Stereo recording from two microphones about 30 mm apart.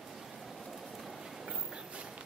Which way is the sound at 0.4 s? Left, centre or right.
Centre.